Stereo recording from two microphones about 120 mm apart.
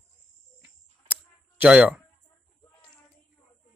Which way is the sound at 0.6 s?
15° right (ahead or behind).